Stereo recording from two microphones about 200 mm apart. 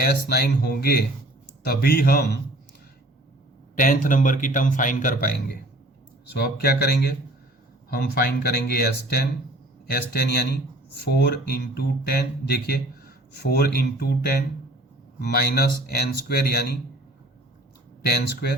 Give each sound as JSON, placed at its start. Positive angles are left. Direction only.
{"t": 0.0, "sound": "speech", "side_deg": 50}
{"t": 3.8, "sound": "a man's voice", "side_deg": 40}
{"t": 18.0, "sound": "speech", "side_deg": 55}